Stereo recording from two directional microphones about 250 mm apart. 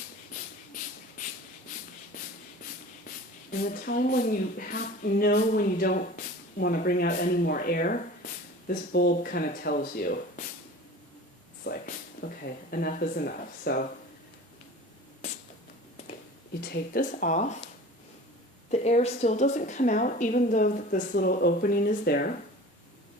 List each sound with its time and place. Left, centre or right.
3.5 s a woman's voice: left
11.6 s speech: left
16.6 s a woman's voice: left
18.7 s a woman's voice: left